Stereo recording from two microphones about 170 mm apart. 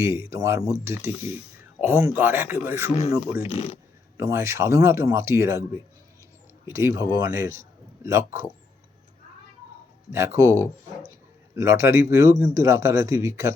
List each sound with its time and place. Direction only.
0.0 s a man's voice: 15° right (ahead or behind)
3.4 s speech: 35° left (ahead or behind)
4.2 s a man's voice: 15° right (ahead or behind)
10.1 s a man's voice: 15° right (ahead or behind)